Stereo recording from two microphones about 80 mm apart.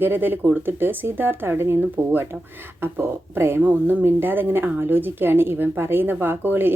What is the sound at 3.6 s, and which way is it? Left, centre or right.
A woman's voice, centre.